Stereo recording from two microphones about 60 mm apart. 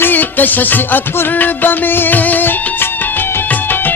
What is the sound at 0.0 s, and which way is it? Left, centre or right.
Music, left.